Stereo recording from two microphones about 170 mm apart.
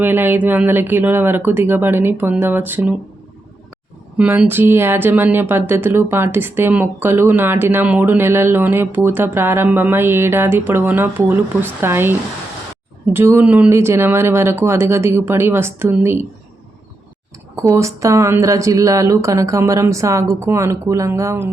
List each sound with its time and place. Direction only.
0.0 s speech: 10° right (ahead or behind)
4.2 s speech: 10° right (ahead or behind)
13.1 s speech: 15° right (ahead or behind)
17.6 s speech: 15° right (ahead or behind)